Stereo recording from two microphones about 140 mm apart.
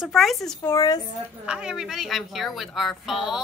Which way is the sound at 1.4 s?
5° right (ahead or behind).